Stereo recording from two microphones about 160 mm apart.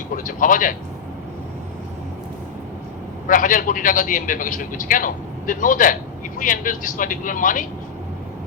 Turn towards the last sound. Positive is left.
turn(degrees=55)  # may be behind; listen again after turning